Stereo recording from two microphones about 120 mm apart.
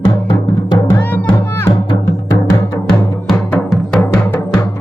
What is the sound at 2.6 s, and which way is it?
Music, 25° left (ahead or behind).